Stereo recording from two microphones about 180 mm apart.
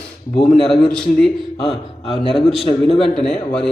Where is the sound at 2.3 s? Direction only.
Centre (ahead or behind).